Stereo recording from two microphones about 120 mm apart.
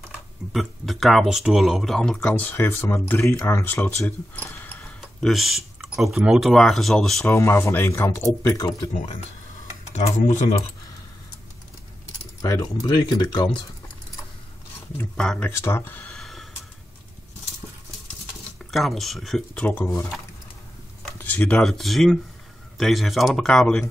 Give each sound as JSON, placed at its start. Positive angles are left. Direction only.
{"t": 0.5, "sound": "speech", "side_deg": 0}
{"t": 5.2, "sound": "speech", "side_deg": 0}
{"t": 7.2, "sound": "speech", "side_deg": 20}
{"t": 8.4, "sound": "speech", "side_deg": 30}
{"t": 9.9, "sound": "speech", "side_deg": 85}
{"t": 12.4, "sound": "speech", "side_deg": 25}
{"t": 12.8, "sound": "speech", "side_deg": 40}
{"t": 15.0, "sound": "speech", "side_deg": 10}
{"t": 15.4, "sound": "speech", "side_deg": 20}
{"t": 16.2, "sound": "snort", "side_deg": 0}
{"t": 18.7, "sound": "speech", "side_deg": 0}
{"t": 19.6, "sound": "speech", "side_deg": 15}
{"t": 21.2, "sound": "speech", "side_deg": 15}